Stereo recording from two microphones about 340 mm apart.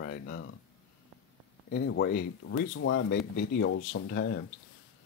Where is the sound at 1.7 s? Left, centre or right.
Left.